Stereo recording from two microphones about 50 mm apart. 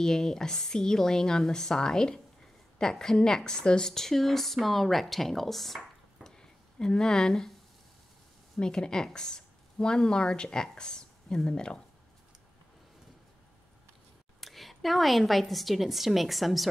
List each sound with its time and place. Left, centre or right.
0.0 s a woman's voice: centre
6.2 s a sound: centre
8.5 s a woman's voice: centre
14.4 s a woman's voice: centre